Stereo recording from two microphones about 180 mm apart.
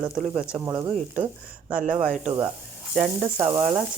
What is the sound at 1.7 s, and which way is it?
Speech, 40° right (ahead or behind).